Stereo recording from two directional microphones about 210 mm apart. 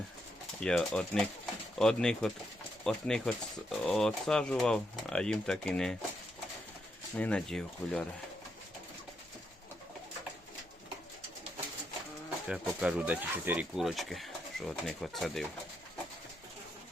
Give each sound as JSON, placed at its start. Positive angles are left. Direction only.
{"t": 0.6, "sound": "speech", "side_deg": 5}
{"t": 7.2, "sound": "speech", "side_deg": 5}
{"t": 12.5, "sound": "speech", "side_deg": -5}